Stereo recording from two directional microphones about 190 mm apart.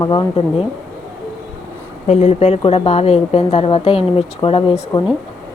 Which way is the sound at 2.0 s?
35° left (ahead or behind).